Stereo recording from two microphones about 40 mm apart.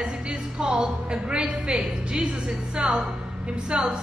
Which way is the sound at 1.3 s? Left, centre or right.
Right.